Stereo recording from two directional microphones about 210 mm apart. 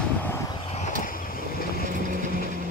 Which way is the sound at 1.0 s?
40° left (ahead or behind).